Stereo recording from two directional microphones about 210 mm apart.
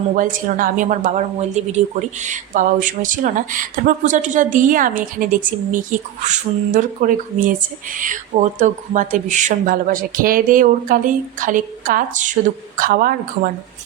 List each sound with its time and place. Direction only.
0.2 s speech: 40° right (ahead or behind)